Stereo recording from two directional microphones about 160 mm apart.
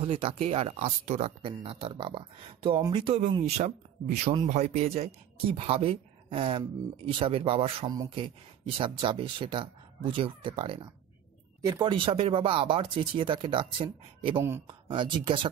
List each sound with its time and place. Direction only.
0.0 s speech: 35° right (ahead or behind)